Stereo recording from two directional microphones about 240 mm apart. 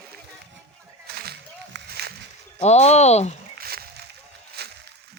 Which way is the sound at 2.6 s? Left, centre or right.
Left.